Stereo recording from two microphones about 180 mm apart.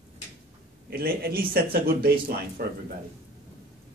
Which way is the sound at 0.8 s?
60° right (ahead or behind).